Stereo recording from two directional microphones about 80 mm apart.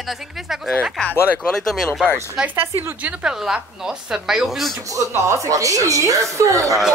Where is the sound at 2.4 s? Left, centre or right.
Right.